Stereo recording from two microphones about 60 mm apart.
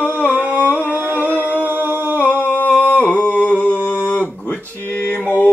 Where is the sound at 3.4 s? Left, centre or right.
Left.